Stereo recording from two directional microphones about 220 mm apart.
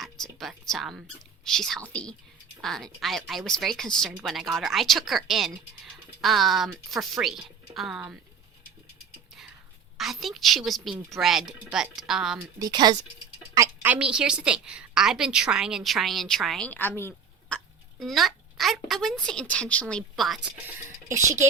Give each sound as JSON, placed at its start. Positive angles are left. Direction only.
{"t": 0.0, "sound": "music", "side_deg": 0}
{"t": 1.5, "sound": "speech", "side_deg": 0}
{"t": 10.0, "sound": "speech", "side_deg": 0}
{"t": 12.5, "sound": "speech", "side_deg": -20}
{"t": 18.0, "sound": "speech", "side_deg": 0}
{"t": 21.1, "sound": "speech", "side_deg": -15}